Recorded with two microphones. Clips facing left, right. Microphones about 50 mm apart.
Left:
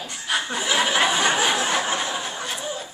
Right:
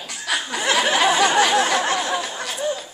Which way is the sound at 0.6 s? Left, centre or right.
Right.